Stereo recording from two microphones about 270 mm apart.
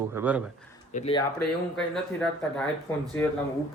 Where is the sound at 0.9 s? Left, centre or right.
Left.